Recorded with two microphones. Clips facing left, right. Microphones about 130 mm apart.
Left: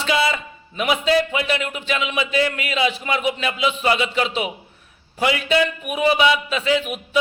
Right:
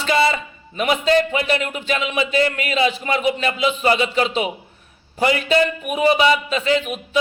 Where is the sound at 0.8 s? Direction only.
5° left (ahead or behind).